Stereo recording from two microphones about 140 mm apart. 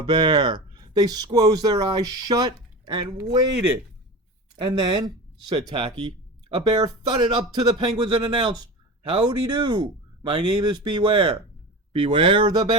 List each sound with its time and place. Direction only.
0.0 s speech: 30° right (ahead or behind)
4.5 s speech: 30° right (ahead or behind)